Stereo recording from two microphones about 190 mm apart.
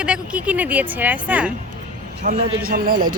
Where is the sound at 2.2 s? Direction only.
45° right (ahead or behind).